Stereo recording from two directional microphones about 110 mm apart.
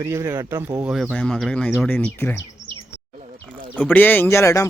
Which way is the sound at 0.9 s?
5° right (ahead or behind).